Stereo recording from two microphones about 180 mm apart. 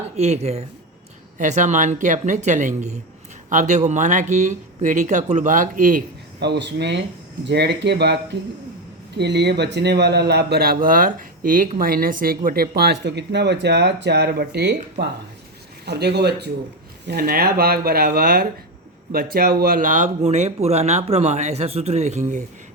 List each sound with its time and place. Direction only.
0.2 s speech: 35° right (ahead or behind)
6.4 s speech: 70° right (ahead or behind)
10.8 s speech: 50° right (ahead or behind); by 16.5 s 65° right (ahead or behind)
17.1 s speech: 55° right (ahead or behind)